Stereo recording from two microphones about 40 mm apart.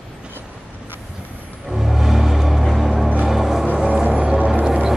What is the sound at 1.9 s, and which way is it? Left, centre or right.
Music, centre.